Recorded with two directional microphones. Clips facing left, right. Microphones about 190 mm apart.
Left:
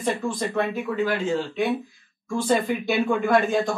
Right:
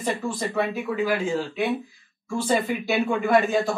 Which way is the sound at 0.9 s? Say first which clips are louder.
Even; 10° right (ahead or behind).